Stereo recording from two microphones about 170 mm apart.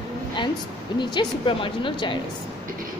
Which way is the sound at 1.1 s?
30° left (ahead or behind).